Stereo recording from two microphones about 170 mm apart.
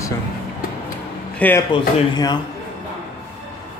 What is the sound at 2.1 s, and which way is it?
Speech, 25° left (ahead or behind).